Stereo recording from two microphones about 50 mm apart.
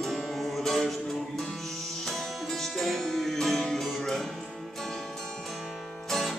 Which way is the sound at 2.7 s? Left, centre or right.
Centre.